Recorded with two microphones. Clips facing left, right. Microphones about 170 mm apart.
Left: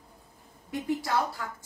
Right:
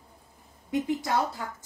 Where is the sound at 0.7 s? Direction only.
20° right (ahead or behind).